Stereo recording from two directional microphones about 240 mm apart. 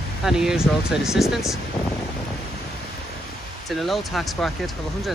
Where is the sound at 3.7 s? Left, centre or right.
Centre.